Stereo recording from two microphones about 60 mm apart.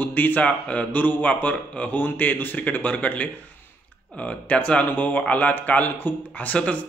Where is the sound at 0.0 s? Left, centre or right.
Left.